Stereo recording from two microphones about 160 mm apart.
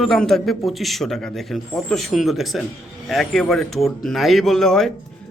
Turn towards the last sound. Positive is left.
turn(degrees=0)  # may be behind; listen again after turning